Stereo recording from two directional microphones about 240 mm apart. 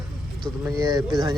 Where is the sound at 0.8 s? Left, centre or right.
Centre.